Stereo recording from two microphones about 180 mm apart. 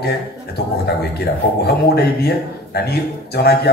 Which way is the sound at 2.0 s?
65° left (ahead or behind).